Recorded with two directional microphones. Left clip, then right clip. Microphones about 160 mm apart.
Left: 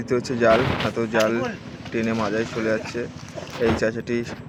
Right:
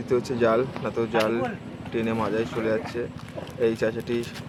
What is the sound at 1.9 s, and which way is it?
Speech, 10° left (ahead or behind).